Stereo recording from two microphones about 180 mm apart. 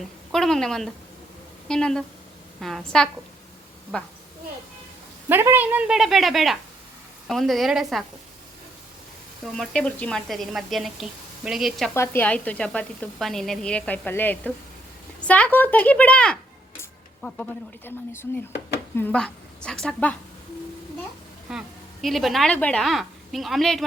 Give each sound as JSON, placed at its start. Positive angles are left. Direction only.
{"t": 0.3, "sound": "a woman's voice", "side_deg": 0}
{"t": 5.3, "sound": "a woman's voice", "side_deg": -10}
{"t": 9.4, "sound": "a woman's voice", "side_deg": 5}
{"t": 11.9, "sound": "a woman's voice", "side_deg": 10}
{"t": 21.5, "sound": "a sound", "side_deg": -5}
{"t": 22.0, "sound": "a woman's voice", "side_deg": 0}